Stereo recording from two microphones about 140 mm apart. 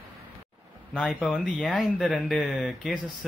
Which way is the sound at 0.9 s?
5° left (ahead or behind).